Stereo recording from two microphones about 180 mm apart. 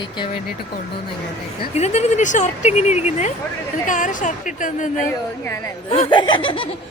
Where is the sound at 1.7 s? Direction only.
40° left (ahead or behind).